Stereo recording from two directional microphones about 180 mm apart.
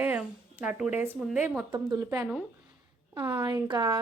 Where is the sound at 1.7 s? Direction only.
20° right (ahead or behind).